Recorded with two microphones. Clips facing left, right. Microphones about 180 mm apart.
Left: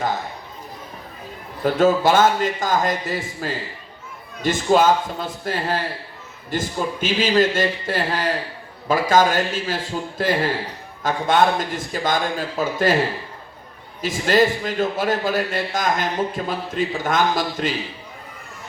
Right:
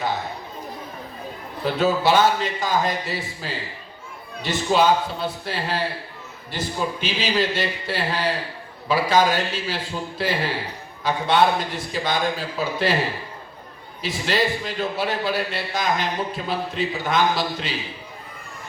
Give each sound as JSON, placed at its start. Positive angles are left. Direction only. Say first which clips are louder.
{"t": 1.6, "sound": "a man's voice", "louder": "left 4 dB", "side_deg": 50}
{"t": 14.0, "sound": "a man's voice", "louder": "left 5 dB", "side_deg": 45}